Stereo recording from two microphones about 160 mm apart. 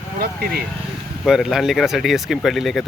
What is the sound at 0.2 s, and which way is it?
Speech, 65° right (ahead or behind).